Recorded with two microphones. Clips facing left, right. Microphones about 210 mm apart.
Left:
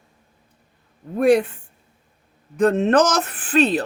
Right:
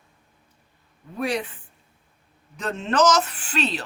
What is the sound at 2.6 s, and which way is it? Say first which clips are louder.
Speech: left 7 dB; 55° left (ahead or behind).